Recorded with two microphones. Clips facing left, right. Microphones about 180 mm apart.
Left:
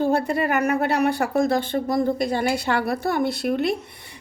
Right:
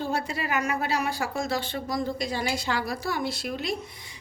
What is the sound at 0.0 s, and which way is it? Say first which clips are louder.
Speech: left 9 dB; 55° left (ahead or behind).